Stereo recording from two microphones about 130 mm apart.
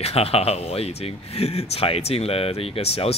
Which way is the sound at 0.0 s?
50° left (ahead or behind).